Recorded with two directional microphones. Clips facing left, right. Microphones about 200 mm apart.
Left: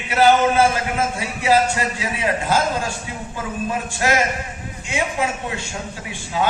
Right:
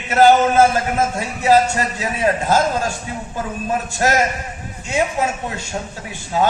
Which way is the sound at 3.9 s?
40° right (ahead or behind).